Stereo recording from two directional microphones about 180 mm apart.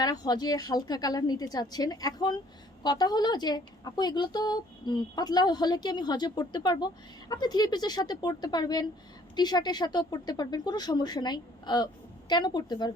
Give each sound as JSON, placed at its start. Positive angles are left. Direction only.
{"t": 0.0, "sound": "a woman's voice", "side_deg": 20}